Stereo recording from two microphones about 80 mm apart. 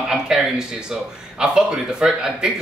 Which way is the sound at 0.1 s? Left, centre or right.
Centre.